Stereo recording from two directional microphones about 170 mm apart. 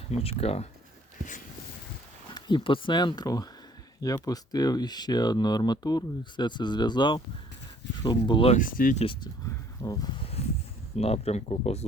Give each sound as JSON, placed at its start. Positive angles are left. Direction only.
{"t": 0.1, "sound": "speech", "side_deg": 35}
{"t": 2.3, "sound": "speech", "side_deg": 30}
{"t": 8.5, "sound": "speech", "side_deg": 55}
{"t": 9.0, "sound": "speech", "side_deg": 30}
{"t": 10.4, "sound": "a sound", "side_deg": 35}
{"t": 10.9, "sound": "speech", "side_deg": 40}